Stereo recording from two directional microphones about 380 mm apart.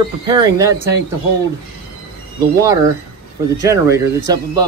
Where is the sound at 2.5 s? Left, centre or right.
Centre.